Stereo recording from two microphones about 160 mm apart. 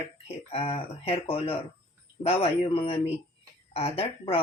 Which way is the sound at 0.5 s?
35° left (ahead or behind).